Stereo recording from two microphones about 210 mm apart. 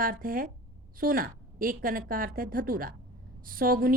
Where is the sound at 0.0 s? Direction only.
40° right (ahead or behind).